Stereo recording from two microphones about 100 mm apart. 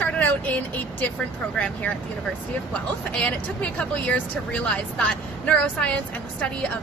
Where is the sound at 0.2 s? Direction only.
15° left (ahead or behind).